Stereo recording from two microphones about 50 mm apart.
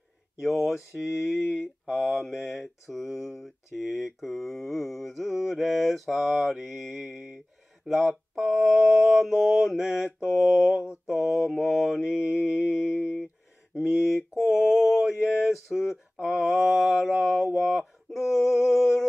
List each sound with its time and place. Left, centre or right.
0.4 s mantra: centre
12.7 s mantra: centre
16.3 s mantra: centre
17.6 s male singing: centre